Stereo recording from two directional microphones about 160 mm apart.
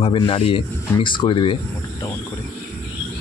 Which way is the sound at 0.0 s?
35° left (ahead or behind).